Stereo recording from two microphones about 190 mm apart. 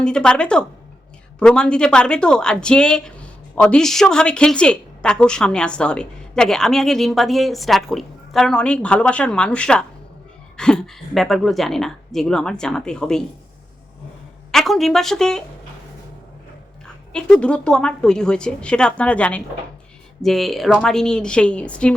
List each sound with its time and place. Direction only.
0.0 s speech: 5° left (ahead or behind)
14.5 s speech: centre (ahead or behind)
16.8 s speech: 5° left (ahead or behind)